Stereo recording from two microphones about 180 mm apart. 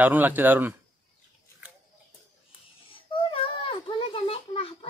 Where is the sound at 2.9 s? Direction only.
30° left (ahead or behind).